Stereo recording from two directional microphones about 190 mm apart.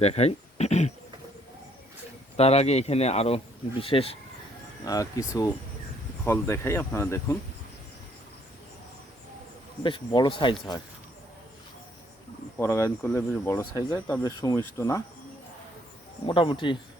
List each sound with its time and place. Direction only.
0.0 s speech: 35° left (ahead or behind)
2.3 s speech: 35° left (ahead or behind)
4.9 s speech: 20° left (ahead or behind)
9.8 s speech: 25° left (ahead or behind)
12.5 s speech: 15° left (ahead or behind)
16.2 s speech: 25° left (ahead or behind)